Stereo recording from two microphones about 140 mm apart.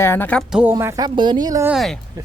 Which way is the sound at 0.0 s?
15° left (ahead or behind).